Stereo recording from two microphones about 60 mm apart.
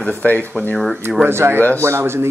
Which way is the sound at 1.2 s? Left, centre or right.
Right.